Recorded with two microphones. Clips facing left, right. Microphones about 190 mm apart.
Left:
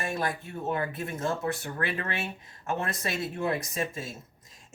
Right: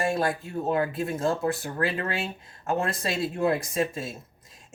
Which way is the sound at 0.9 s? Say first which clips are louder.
Right 5 dB; 30° right (ahead or behind).